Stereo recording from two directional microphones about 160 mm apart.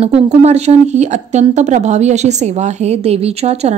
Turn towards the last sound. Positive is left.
turn(degrees=-40)  # may be behind; listen again after turning